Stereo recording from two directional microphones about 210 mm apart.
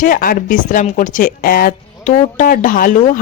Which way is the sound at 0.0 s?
40° left (ahead or behind).